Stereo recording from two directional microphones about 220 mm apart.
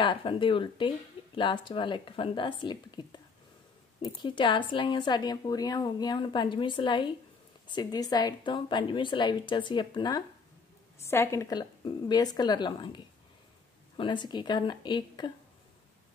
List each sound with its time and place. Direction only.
0.0 s speech: 20° left (ahead or behind)